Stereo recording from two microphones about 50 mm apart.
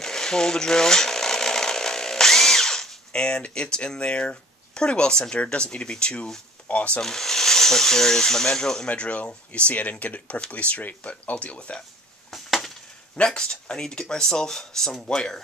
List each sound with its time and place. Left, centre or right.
0.0 s a sound: centre
3.1 s speech: centre
7.0 s speech: centre
8.8 s speech: left
12.3 s a sound: centre
13.1 s speech: centre